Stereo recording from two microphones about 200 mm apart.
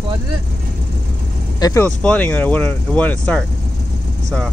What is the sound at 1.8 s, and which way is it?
Speech, 5° left (ahead or behind).